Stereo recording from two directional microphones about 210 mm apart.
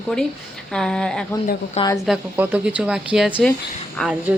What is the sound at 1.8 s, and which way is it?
Speech, 15° left (ahead or behind).